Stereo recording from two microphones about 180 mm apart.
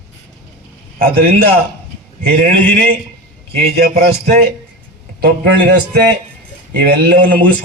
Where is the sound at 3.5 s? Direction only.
60° right (ahead or behind).